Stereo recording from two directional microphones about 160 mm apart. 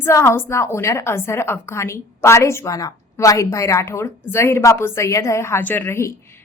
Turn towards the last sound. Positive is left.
turn(degrees=15)  # may be behind; listen again after turning